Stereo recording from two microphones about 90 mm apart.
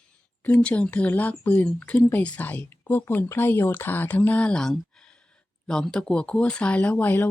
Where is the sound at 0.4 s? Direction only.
15° left (ahead or behind).